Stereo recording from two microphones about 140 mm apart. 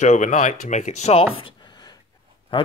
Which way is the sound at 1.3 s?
35° left (ahead or behind).